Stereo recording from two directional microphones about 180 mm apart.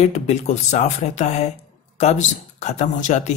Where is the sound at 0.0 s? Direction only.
40° left (ahead or behind).